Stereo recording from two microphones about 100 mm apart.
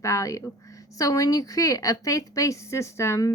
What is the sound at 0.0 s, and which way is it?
Speech, 30° left (ahead or behind).